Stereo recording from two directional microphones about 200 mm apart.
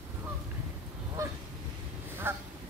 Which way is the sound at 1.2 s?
15° right (ahead or behind).